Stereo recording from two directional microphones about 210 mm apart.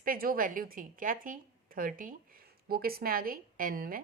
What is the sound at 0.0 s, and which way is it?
A woman's voice, 40° right (ahead or behind).